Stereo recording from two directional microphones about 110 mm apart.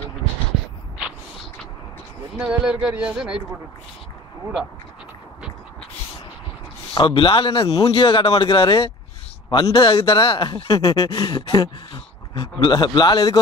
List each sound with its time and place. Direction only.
2.3 s a man's voice: 10° right (ahead or behind)
7.0 s a man's voice: 55° left (ahead or behind); by 13.4 s 35° left (ahead or behind)